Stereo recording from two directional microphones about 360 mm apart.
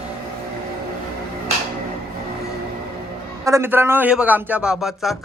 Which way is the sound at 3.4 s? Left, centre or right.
Centre.